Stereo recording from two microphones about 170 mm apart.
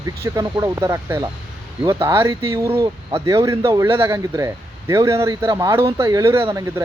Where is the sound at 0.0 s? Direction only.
20° right (ahead or behind).